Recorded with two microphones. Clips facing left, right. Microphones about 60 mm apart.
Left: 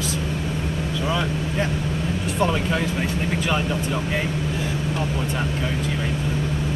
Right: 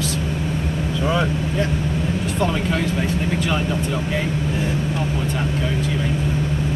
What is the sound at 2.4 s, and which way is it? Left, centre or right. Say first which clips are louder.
Vehicle: even; centre.